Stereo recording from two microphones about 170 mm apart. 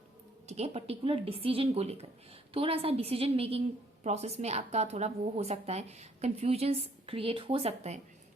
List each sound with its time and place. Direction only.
0.4 s a woman's voice: 40° right (ahead or behind)